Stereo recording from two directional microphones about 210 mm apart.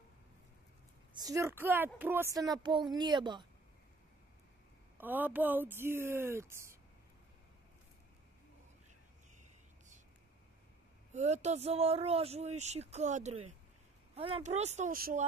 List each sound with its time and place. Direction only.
1.1 s a woman's voice: 15° right (ahead or behind)
4.9 s speech: 10° right (ahead or behind)
11.1 s speech: 35° right (ahead or behind)